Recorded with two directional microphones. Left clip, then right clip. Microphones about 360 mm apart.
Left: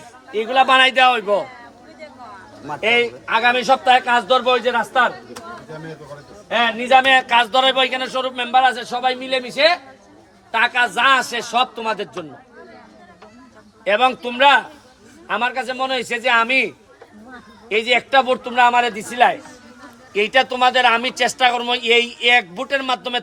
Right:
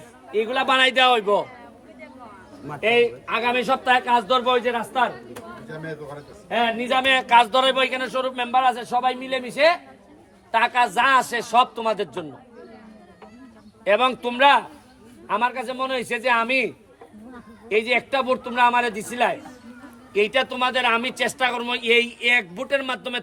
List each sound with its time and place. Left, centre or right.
0.5 s a man's voice: centre
1.1 s speech: centre
2.6 s a man's voice: centre
6.6 s speech: centre
10.8 s speech: centre
11.8 s speech: centre
13.8 s a man's voice: centre